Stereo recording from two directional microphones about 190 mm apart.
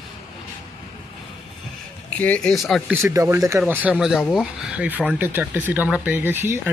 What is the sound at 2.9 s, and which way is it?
Speech, 15° right (ahead or behind).